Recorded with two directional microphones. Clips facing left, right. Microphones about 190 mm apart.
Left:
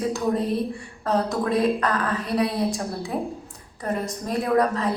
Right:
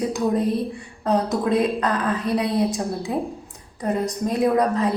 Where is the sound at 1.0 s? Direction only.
15° right (ahead or behind).